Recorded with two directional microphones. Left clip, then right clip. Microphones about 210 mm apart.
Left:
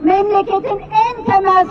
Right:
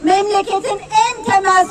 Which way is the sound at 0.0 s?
20° right (ahead or behind).